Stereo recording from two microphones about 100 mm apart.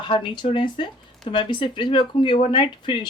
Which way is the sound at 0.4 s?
55° left (ahead or behind).